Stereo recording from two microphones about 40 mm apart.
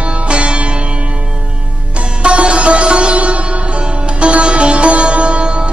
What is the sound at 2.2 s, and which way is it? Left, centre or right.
Sitar, right.